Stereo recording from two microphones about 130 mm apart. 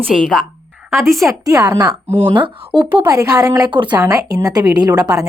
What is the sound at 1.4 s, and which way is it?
A woman's voice, 30° right (ahead or behind).